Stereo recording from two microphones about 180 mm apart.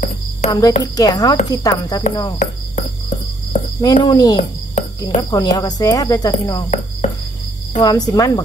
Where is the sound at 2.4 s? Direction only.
40° left (ahead or behind).